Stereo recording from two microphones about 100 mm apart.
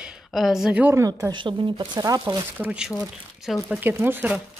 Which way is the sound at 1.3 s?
55° right (ahead or behind).